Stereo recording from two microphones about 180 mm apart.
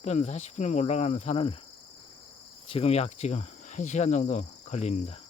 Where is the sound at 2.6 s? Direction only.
30° left (ahead or behind).